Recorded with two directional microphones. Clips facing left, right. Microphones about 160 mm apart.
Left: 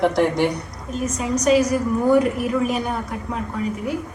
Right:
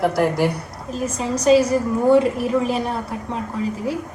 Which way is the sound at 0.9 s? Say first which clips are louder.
Even; 30° right (ahead or behind).